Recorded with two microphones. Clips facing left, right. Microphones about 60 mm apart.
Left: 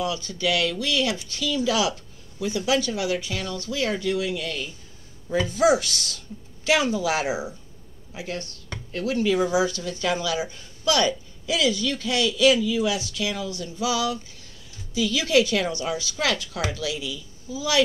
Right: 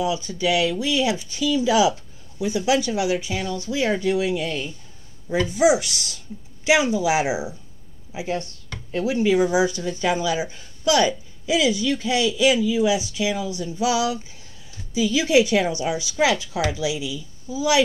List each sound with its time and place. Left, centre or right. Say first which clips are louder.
0.0 s speech: right 3 dB; centre
5.5 s speech: right 2 dB; centre